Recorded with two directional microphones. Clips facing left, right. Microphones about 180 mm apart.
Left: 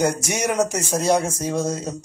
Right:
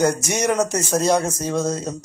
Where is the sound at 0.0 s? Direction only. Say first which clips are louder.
Right 2 dB; 10° left (ahead or behind).